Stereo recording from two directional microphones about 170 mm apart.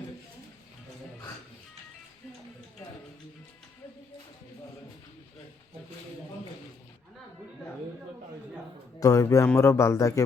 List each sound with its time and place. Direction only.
9.0 s speech: 20° left (ahead or behind)